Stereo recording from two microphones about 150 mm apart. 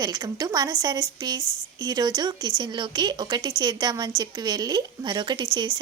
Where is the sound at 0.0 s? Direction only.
25° right (ahead or behind).